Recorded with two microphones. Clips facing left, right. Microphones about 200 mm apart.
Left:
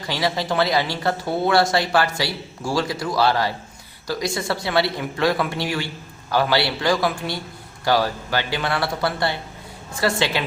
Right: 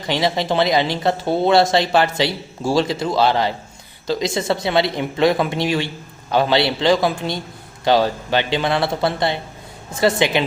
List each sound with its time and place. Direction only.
0.1 s speech: 20° right (ahead or behind)